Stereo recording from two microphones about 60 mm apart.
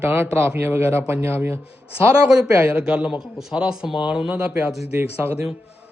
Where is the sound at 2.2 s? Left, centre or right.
Centre.